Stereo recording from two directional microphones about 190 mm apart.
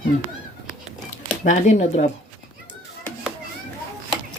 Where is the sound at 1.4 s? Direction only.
40° left (ahead or behind).